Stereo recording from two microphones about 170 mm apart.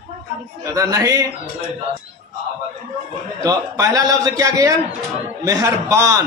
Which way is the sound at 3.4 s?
20° right (ahead or behind).